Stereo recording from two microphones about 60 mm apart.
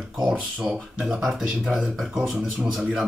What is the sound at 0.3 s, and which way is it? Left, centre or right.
Speech, centre.